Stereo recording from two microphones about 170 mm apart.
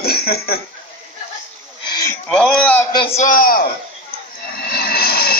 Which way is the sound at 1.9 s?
20° left (ahead or behind).